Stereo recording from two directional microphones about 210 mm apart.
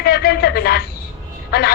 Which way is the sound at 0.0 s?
50° left (ahead or behind).